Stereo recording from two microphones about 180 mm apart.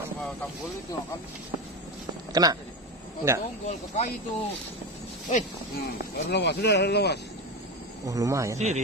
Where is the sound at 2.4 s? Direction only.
20° right (ahead or behind).